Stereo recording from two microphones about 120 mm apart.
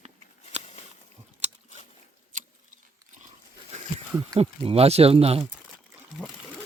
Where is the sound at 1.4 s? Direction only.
70° right (ahead or behind).